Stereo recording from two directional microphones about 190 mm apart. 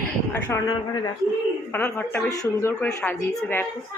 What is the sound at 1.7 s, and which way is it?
Speech, 10° left (ahead or behind).